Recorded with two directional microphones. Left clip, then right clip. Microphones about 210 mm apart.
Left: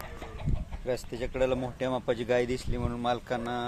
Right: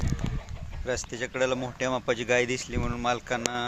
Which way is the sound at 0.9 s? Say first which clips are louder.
Right 2 dB; 5° right (ahead or behind).